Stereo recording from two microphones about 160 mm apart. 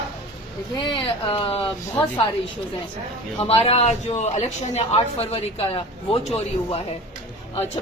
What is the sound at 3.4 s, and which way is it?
Speech, 40° left (ahead or behind).